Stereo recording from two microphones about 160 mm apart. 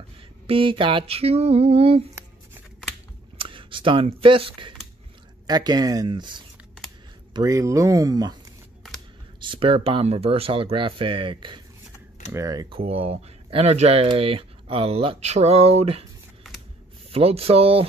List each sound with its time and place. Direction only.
0.5 s speech: 35° right (ahead or behind)
3.3 s speech: 30° right (ahead or behind)
7.3 s speech: 20° right (ahead or behind)
9.4 s speech: 30° right (ahead or behind)
12.7 s speech: 35° right (ahead or behind)
17.1 s speech: 40° right (ahead or behind)